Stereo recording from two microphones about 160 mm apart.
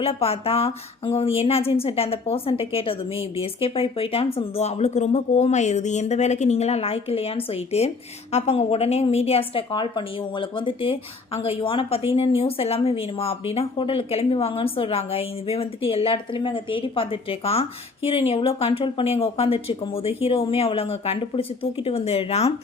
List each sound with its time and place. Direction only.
0.0 s speech: 35° left (ahead or behind)